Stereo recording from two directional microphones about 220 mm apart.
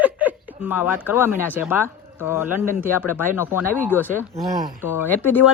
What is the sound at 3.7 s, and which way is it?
Speech, 10° left (ahead or behind).